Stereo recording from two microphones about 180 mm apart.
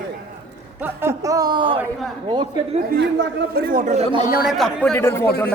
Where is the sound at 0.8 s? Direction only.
15° right (ahead or behind).